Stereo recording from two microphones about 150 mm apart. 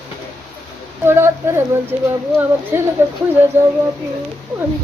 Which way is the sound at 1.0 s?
15° right (ahead or behind).